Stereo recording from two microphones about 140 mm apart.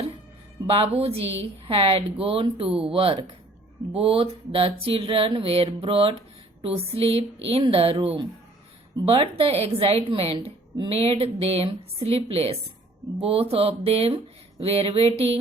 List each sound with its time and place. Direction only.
0.7 s a woman's voice: 45° right (ahead or behind)
3.9 s a sound: 40° right (ahead or behind)
9.0 s a woman's voice: 45° right (ahead or behind)